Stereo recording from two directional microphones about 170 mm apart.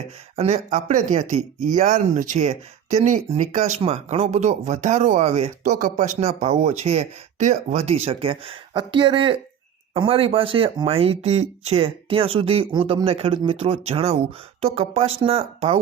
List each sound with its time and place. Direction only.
0.3 s speech: 40° right (ahead or behind)